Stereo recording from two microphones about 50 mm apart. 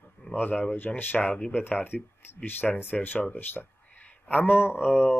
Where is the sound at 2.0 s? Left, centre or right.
Left.